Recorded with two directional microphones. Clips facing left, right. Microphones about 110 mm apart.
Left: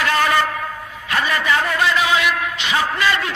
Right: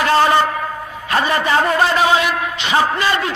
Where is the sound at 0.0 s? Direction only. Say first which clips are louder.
Right 4 dB; 30° right (ahead or behind).